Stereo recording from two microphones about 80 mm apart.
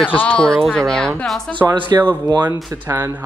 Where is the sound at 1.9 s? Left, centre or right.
Right.